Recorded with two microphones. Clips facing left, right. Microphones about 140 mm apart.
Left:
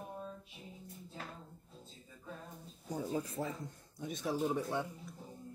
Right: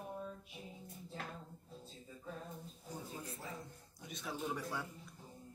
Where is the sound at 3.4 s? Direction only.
55° left (ahead or behind).